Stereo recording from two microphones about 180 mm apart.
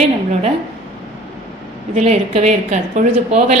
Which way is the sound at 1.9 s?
35° right (ahead or behind).